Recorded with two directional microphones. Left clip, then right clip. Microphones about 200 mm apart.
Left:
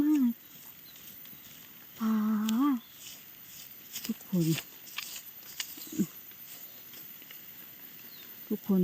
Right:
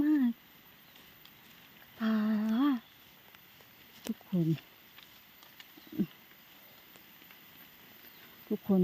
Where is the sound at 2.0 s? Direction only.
20° right (ahead or behind).